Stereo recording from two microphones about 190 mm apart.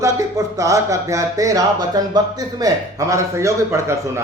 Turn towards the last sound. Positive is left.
turn(degrees=-15)  # may be behind; listen again after turning